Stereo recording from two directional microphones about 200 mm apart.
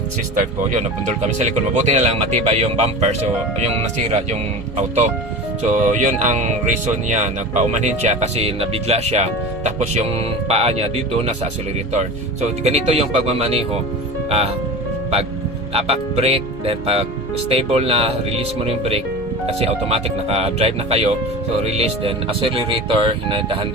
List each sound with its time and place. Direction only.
1.4 s speech: 35° right (ahead or behind)
4.8 s speech: 35° right (ahead or behind)
12.6 s speech: 30° right (ahead or behind)
15.7 s speech: 30° right (ahead or behind)